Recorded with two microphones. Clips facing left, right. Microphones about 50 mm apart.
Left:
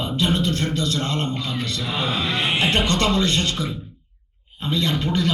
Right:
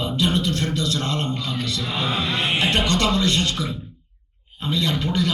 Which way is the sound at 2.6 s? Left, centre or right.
Left.